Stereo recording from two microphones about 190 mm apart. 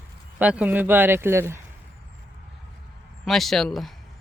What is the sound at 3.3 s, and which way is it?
Speech, centre (ahead or behind).